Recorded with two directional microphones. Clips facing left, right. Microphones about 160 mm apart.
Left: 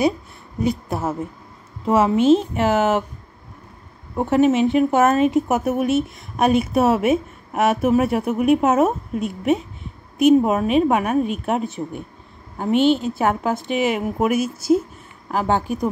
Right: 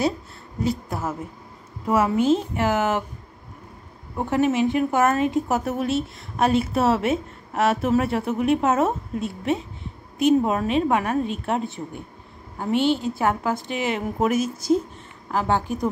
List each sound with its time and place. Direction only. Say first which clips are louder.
0.6 s a woman's voice: left 3 dB; 20° left (ahead or behind)
4.2 s a woman's voice: left 4 dB; 20° left (ahead or behind)